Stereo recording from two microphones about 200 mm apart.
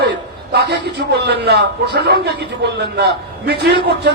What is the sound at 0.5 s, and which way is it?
A man's voice, 55° right (ahead or behind).